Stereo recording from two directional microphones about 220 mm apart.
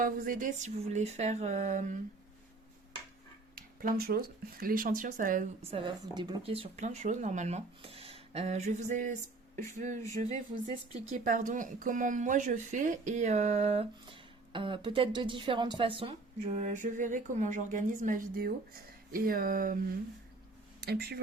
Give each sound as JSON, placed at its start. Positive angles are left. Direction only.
{"t": 0.0, "sound": "speech", "side_deg": -40}
{"t": 3.5, "sound": "speech", "side_deg": -40}
{"t": 5.7, "sound": "speech", "side_deg": -20}
{"t": 11.0, "sound": "speech", "side_deg": -35}
{"t": 20.8, "sound": "speech", "side_deg": -45}